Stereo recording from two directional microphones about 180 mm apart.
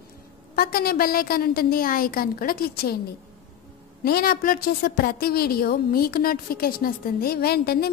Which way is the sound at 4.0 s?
60° left (ahead or behind).